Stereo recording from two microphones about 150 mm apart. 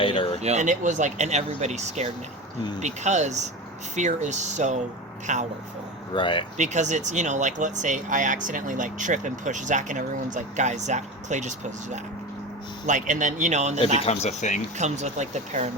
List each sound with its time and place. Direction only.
0.0 s a sound: 35° left (ahead or behind)
0.4 s speech: 50° right (ahead or behind)
6.1 s speech: 35° left (ahead or behind)
6.6 s speech: 50° right (ahead or behind)
14.0 s speech: 45° left (ahead or behind)
14.8 s speech: 50° right (ahead or behind)